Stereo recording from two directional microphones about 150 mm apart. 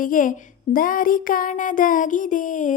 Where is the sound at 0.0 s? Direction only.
65° left (ahead or behind).